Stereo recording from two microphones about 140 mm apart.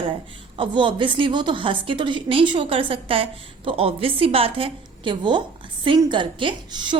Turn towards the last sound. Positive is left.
turn(degrees=-35)  # may be behind; listen again after turning